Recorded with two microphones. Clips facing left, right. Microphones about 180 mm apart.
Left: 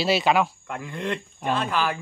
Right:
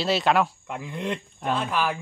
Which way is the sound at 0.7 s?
10° right (ahead or behind).